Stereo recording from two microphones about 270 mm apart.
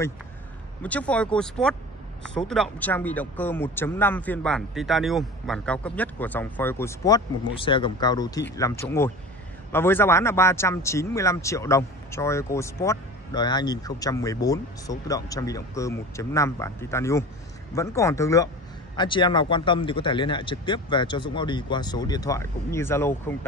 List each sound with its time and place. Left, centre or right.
0.8 s a man's voice: centre